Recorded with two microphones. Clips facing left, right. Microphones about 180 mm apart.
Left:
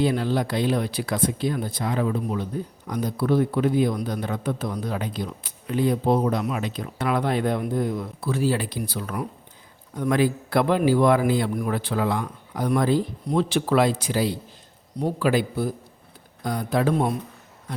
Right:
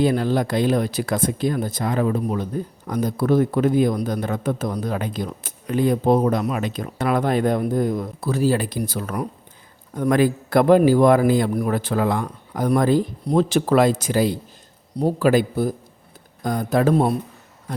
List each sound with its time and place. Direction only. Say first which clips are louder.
0.0 s speech: right 3 dB; 45° right (ahead or behind)